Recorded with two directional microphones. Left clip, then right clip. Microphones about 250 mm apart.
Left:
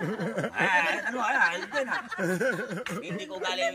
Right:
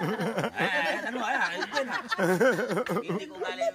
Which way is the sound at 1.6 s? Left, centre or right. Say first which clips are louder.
Even; right.